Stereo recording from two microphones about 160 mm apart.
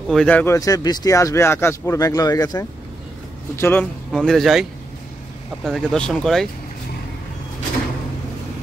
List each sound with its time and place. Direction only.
0.1 s speech: 5° left (ahead or behind)
0.6 s speech: 20° left (ahead or behind)
4.1 s speech: centre (ahead or behind)